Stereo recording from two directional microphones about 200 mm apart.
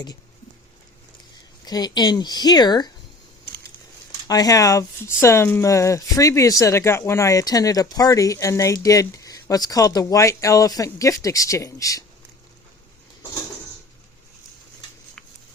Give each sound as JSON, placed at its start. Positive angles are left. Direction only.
{"t": 1.6, "sound": "speech", "side_deg": 20}
{"t": 4.3, "sound": "speech", "side_deg": 20}